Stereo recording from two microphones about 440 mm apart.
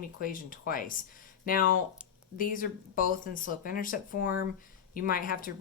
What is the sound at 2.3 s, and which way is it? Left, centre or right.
Speech, centre.